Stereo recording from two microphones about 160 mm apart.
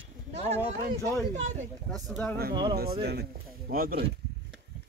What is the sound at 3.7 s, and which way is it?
Speech, 65° right (ahead or behind).